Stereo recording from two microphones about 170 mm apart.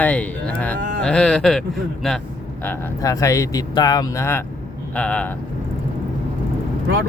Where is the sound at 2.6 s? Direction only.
15° left (ahead or behind).